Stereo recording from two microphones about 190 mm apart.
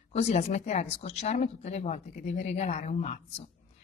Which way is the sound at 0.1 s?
35° left (ahead or behind).